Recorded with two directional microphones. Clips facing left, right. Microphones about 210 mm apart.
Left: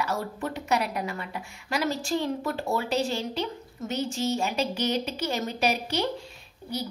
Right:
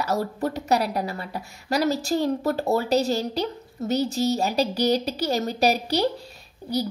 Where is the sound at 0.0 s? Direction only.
40° right (ahead or behind).